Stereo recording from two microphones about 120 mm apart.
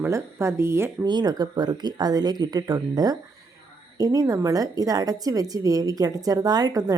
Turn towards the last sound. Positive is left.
turn(degrees=-35)  # may be behind; listen again after turning